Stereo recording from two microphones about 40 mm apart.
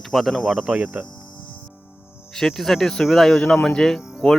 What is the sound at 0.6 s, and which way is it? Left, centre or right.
Speech, right.